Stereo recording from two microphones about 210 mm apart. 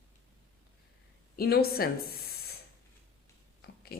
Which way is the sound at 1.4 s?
45° left (ahead or behind).